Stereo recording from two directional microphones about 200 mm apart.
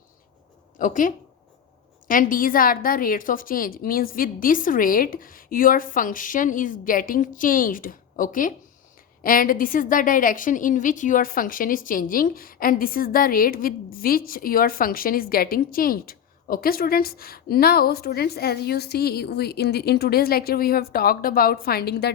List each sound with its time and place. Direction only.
0.8 s a woman's voice: 40° left (ahead or behind)